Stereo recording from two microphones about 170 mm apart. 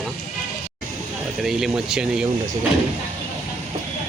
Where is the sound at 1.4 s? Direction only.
5° right (ahead or behind).